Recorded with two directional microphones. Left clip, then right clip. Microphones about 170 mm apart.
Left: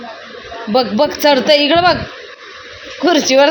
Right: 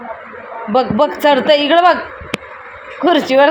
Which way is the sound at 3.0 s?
15° left (ahead or behind).